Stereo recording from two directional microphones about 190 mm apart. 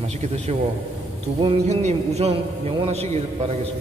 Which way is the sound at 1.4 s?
35° right (ahead or behind).